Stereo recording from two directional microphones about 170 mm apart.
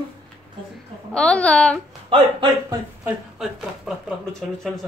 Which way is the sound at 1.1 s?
5° left (ahead or behind).